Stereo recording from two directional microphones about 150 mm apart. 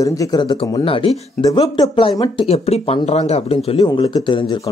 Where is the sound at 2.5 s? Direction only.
45° left (ahead or behind).